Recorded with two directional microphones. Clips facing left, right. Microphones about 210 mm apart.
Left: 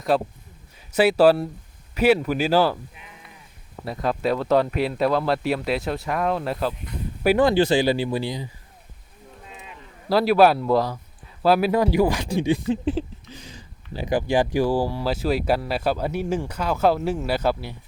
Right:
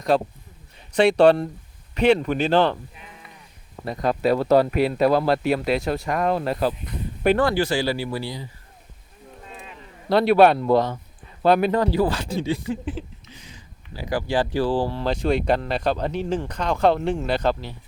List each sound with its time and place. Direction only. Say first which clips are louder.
0.1 s speech: right 1 dB; 5° left (ahead or behind)
3.8 s speech: right 2 dB; centre (ahead or behind)
7.3 s speech: left 3 dB; 20° left (ahead or behind)
10.1 s speech: right 1 dB; centre (ahead or behind); by 14.0 s 35° left (ahead or behind)
14.0 s speech: left 2 dB; 20° left (ahead or behind)